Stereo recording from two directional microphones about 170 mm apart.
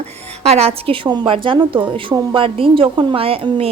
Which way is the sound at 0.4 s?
35° right (ahead or behind).